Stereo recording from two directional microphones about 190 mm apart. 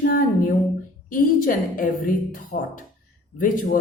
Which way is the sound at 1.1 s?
45° left (ahead or behind).